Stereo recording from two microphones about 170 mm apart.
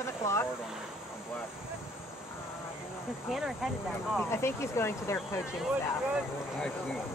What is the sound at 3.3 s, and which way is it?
Speech, centre (ahead or behind).